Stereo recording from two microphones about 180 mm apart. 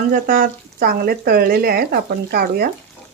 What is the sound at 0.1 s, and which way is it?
Speech, 50° right (ahead or behind).